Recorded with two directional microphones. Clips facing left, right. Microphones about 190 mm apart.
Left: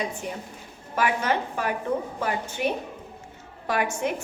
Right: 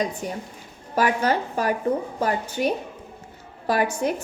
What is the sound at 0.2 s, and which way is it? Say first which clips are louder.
A woman's voice: right 3 dB; 40° right (ahead or behind).